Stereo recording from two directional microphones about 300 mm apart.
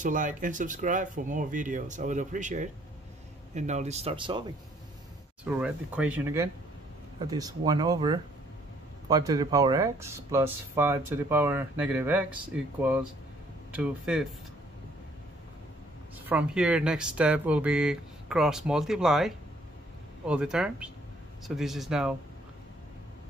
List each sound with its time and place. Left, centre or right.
0.0 s speech: right
5.4 s speech: centre
16.3 s speech: centre